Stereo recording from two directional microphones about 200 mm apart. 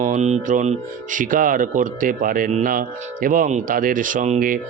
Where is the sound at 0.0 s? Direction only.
40° right (ahead or behind).